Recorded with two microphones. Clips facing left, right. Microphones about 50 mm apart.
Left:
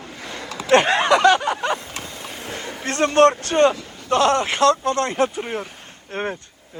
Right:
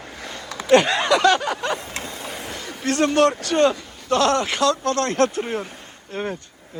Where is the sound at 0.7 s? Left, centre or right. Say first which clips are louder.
Left 1 dB; left.